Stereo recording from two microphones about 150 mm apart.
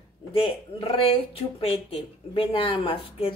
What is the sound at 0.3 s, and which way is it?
Speech, 40° left (ahead or behind).